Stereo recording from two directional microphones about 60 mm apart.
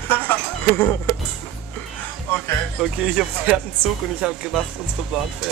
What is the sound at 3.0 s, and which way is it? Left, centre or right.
Speech, centre.